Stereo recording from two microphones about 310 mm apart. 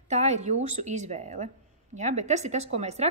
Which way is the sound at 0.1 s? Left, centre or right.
Right.